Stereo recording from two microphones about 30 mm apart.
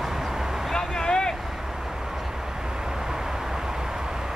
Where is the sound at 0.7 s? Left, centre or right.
Centre.